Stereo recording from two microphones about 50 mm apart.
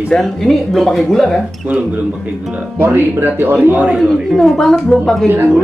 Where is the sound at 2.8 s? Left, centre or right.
Right.